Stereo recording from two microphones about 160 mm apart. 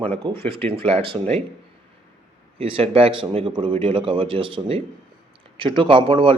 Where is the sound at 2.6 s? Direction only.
35° right (ahead or behind).